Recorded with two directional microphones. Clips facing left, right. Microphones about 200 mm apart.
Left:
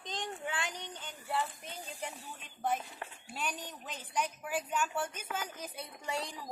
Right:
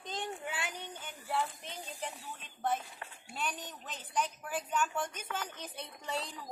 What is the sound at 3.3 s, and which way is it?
A woman's voice, 10° left (ahead or behind).